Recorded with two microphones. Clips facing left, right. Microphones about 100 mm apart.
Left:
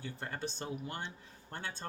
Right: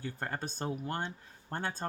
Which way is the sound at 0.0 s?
45° right (ahead or behind).